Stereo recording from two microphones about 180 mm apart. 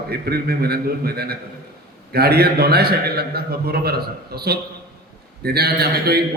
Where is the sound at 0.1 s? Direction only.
60° right (ahead or behind).